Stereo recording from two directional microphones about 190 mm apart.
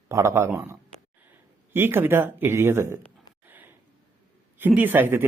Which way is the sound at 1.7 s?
10° right (ahead or behind).